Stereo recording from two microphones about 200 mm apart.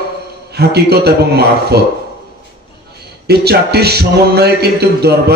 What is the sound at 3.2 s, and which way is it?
A man's voice, 55° right (ahead or behind).